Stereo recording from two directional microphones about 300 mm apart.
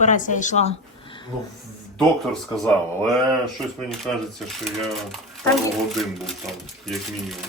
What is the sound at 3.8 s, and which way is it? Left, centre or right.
Speech, centre.